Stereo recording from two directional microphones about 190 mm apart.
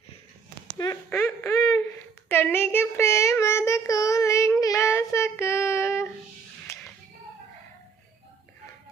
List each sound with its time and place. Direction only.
0.8 s speech: 15° left (ahead or behind)
2.3 s child singing: 10° left (ahead or behind)
6.7 s a sound: 15° left (ahead or behind)